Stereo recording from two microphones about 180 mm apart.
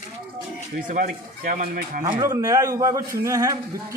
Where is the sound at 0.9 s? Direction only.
45° right (ahead or behind).